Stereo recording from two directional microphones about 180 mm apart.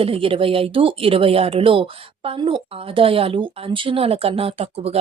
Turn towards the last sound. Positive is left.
turn(degrees=-35)  # may be behind; listen again after turning